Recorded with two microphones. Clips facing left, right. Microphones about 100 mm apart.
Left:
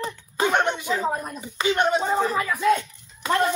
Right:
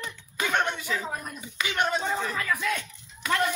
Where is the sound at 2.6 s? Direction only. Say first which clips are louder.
Left 10 dB; 35° left (ahead or behind).